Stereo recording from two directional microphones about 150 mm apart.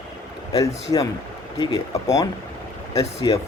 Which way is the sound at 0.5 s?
25° left (ahead or behind).